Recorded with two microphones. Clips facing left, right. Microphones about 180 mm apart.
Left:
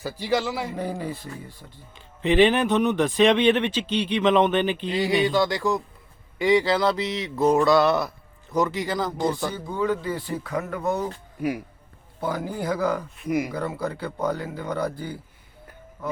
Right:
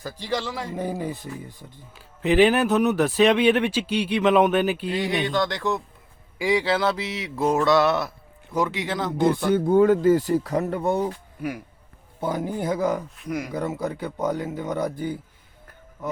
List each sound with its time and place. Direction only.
0.0 s a man's voice: 10° left (ahead or behind)
0.8 s speech: 20° right (ahead or behind)
2.0 s speech: 5° right (ahead or behind)
6.4 s a sound: 5° right (ahead or behind)
9.6 s speech: 50° right (ahead or behind); by 11.1 s 30° right (ahead or behind)
12.2 s speech: 20° right (ahead or behind)
13.1 s a man's voice: 10° left (ahead or behind)
13.5 s speech: 20° right (ahead or behind)